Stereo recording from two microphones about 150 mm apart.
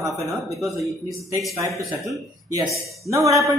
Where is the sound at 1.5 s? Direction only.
20° right (ahead or behind).